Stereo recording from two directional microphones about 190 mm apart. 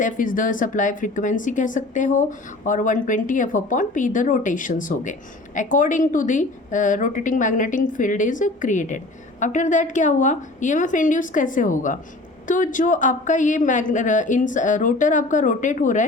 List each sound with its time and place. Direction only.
0.0 s a woman's voice: 45° left (ahead or behind)